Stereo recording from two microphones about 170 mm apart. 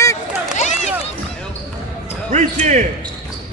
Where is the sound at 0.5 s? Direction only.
40° left (ahead or behind).